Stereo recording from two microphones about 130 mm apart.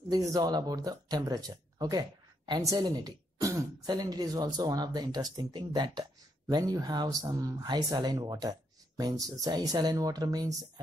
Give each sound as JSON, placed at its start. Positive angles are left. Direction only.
{"t": 0.1, "sound": "speech", "side_deg": -30}